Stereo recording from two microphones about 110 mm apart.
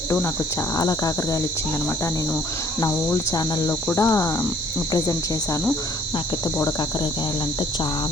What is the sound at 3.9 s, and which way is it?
Speech, 30° left (ahead or behind).